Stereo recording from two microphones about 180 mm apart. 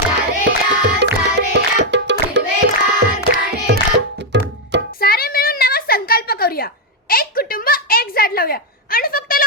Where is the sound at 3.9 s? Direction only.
75° right (ahead or behind).